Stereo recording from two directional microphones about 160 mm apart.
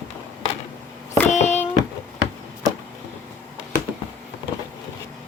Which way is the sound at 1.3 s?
45° left (ahead or behind).